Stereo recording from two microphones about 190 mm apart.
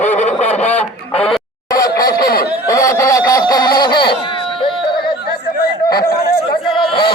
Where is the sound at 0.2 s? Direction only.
35° left (ahead or behind).